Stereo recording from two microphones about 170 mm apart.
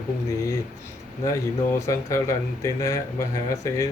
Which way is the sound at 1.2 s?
20° left (ahead or behind).